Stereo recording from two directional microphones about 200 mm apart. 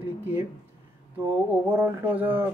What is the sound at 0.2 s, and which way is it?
A man's voice, 10° right (ahead or behind).